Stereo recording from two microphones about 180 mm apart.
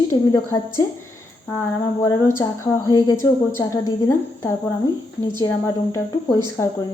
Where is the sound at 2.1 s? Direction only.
15° left (ahead or behind).